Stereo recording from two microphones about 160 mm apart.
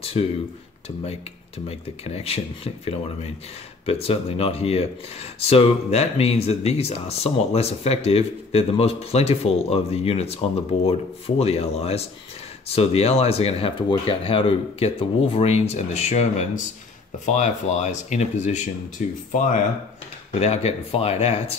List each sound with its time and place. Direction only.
0.0 s speech: 40° left (ahead or behind)
1.7 s speech: 40° left (ahead or behind); by 19.1 s 55° left (ahead or behind)
20.3 s speech: 45° left (ahead or behind)